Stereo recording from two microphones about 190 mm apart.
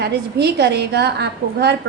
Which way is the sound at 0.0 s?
60° right (ahead or behind).